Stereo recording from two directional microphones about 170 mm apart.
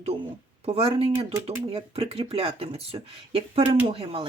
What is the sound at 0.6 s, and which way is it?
Speech, 35° right (ahead or behind).